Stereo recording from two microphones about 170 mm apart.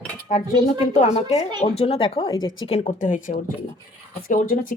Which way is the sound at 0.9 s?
40° left (ahead or behind).